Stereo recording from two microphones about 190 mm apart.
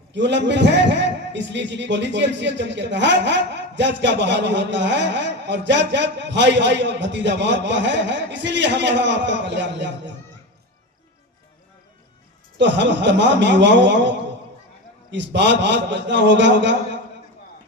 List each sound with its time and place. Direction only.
0.1 s a man's voice: 65° right (ahead or behind)
12.5 s a man's voice: 70° right (ahead or behind)
15.1 s a man's voice: 65° right (ahead or behind)